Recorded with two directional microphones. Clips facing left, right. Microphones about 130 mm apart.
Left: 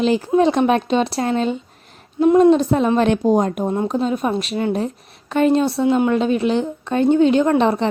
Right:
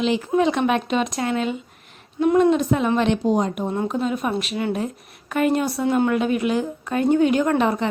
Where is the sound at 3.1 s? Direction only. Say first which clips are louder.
Left 4 dB; 50° left (ahead or behind).